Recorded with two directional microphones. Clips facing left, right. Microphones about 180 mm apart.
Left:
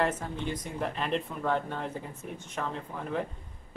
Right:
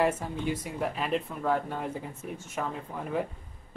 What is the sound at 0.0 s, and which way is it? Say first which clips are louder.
Speech: right 2 dB; 10° right (ahead or behind).